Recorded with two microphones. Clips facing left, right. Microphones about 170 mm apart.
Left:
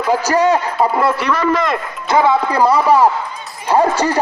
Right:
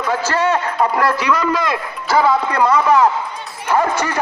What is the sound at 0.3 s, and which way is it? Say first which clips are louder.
Speech: left 3 dB; 15° left (ahead or behind).